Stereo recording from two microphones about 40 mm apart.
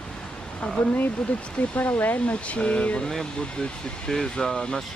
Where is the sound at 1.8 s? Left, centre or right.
Left.